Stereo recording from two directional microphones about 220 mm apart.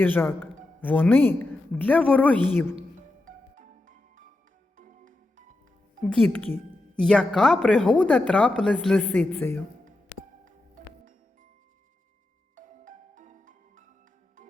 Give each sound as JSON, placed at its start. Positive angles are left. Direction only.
{"t": 0.0, "sound": "a woman's voice", "side_deg": 10}
{"t": 3.2, "sound": "music", "side_deg": -35}
{"t": 6.1, "sound": "a woman's voice", "side_deg": 5}
{"t": 10.4, "sound": "music", "side_deg": -35}
{"t": 12.5, "sound": "music", "side_deg": -35}